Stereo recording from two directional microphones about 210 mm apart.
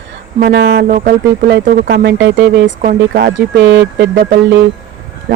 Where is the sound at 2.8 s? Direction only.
40° right (ahead or behind).